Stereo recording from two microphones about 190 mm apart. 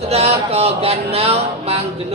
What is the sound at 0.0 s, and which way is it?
A man's voice, 35° right (ahead or behind).